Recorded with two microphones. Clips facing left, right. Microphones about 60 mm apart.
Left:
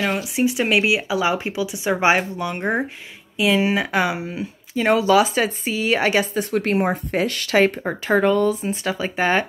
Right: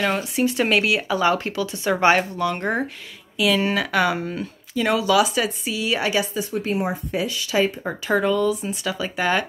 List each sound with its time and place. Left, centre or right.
0.0 s speech: centre
3.3 s speech: left; by 4.5 s centre
4.7 s a woman's voice: left
6.5 s speech: left
8.1 s a woman's voice: left